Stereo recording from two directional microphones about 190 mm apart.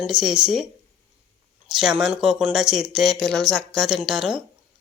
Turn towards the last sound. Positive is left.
turn(degrees=-5)  # may be behind; listen again after turning